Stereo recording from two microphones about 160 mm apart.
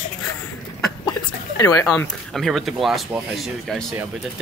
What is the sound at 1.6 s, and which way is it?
Speech, 20° left (ahead or behind).